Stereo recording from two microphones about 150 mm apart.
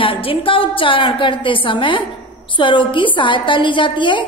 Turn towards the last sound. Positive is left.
turn(degrees=30)  # may be behind; listen again after turning